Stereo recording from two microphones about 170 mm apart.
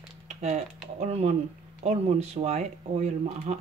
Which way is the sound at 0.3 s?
40° right (ahead or behind).